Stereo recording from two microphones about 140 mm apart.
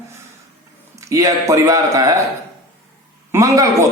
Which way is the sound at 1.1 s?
20° right (ahead or behind).